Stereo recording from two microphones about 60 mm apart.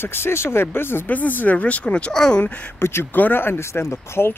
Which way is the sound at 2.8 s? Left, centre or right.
Left.